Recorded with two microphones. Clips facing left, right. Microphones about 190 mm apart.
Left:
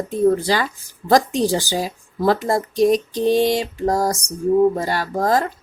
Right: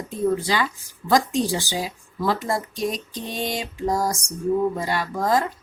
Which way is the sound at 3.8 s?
35° left (ahead or behind).